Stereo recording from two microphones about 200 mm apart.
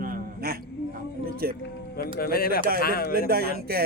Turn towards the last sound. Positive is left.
turn(degrees=-50)  # may be behind; listen again after turning